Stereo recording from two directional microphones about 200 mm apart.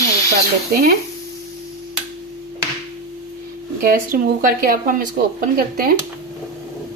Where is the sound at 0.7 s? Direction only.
50° right (ahead or behind).